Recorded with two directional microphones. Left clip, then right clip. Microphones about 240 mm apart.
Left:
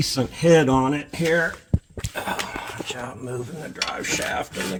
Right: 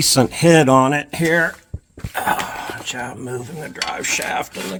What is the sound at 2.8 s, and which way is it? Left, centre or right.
Speech, right.